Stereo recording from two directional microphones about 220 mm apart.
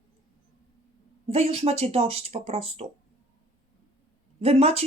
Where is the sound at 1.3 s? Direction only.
25° right (ahead or behind).